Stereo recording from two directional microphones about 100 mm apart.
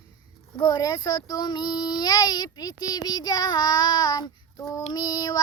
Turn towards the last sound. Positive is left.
turn(degrees=40)  # may be behind; listen again after turning